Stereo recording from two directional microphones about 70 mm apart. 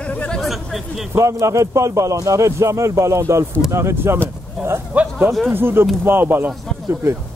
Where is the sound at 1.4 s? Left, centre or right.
Right.